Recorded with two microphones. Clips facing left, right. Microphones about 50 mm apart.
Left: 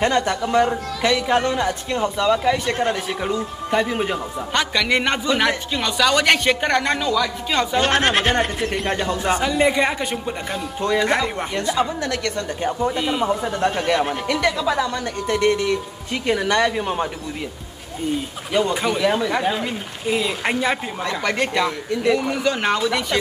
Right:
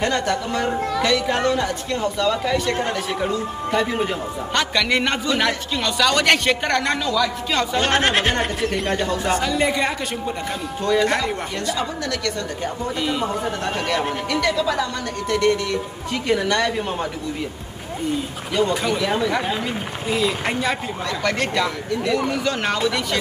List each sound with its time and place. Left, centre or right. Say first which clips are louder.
0.0 s a man's voice: left 2 dB; centre
9.0 s speech: even; centre
12.9 s speech: left 2 dB; centre
18.5 s a man's voice: left 1 dB; centre
20.1 s speech: left 1 dB; centre